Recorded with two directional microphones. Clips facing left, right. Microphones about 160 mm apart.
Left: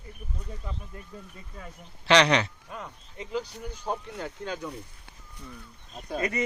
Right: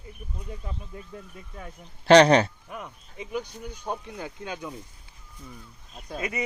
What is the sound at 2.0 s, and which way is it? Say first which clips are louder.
Speech: right 6 dB; 45° right (ahead or behind).